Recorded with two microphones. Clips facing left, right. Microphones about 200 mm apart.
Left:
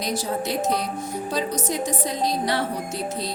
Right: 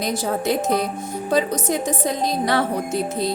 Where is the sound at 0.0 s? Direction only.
55° right (ahead or behind).